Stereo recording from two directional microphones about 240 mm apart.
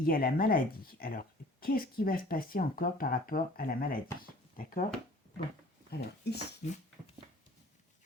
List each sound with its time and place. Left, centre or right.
0.0 s speech: left
5.9 s speech: left